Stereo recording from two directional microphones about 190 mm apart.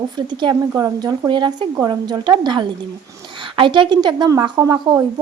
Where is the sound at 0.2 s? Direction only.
25° right (ahead or behind).